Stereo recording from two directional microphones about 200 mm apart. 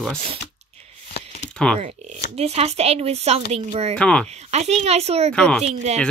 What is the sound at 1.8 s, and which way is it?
A woman's voice, 30° right (ahead or behind).